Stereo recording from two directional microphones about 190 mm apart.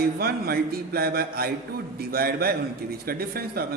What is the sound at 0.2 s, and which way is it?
A woman's voice, 55° right (ahead or behind).